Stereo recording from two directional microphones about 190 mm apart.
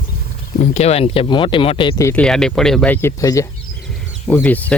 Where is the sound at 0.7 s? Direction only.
35° left (ahead or behind).